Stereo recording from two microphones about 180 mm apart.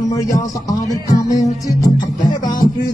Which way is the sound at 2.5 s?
20° left (ahead or behind).